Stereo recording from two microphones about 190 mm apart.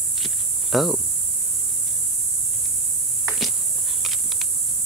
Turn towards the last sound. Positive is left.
turn(degrees=0)  # may be behind; listen again after turning